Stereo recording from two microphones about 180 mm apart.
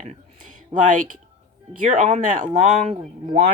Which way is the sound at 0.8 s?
45° right (ahead or behind).